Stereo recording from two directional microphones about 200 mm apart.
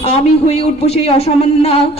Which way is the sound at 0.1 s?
30° left (ahead or behind).